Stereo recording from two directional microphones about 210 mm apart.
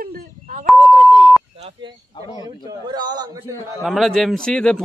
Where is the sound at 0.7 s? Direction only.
Centre (ahead or behind).